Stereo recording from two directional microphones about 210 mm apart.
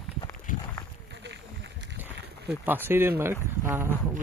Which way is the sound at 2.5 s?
10° right (ahead or behind).